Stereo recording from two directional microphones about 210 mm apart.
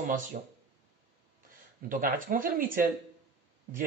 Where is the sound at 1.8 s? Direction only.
40° right (ahead or behind).